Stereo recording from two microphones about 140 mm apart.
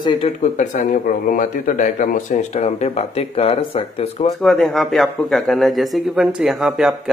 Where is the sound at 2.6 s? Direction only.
50° left (ahead or behind).